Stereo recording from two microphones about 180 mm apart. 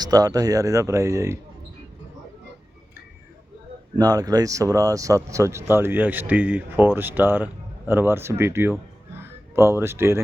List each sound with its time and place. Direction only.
0.0 s speech: 20° right (ahead or behind)
3.9 s speech: 20° right (ahead or behind)